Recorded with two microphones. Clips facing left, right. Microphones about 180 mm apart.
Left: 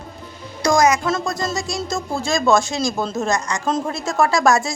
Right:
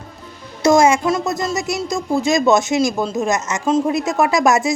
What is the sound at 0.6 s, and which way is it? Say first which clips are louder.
Music: right 3 dB; 25° right (ahead or behind).